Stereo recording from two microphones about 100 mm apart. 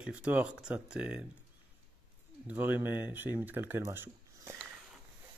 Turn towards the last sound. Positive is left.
turn(degrees=-25)  # may be behind; listen again after turning